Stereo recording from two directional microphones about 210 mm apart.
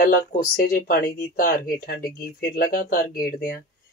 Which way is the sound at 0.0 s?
45° left (ahead or behind).